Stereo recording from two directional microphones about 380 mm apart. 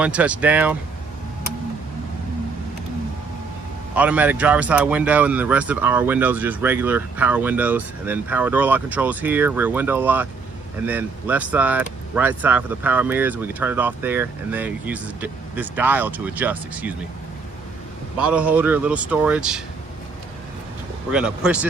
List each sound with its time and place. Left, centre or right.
0.0 s speech: centre
3.9 s speech: centre
18.2 s speech: centre
21.1 s speech: centre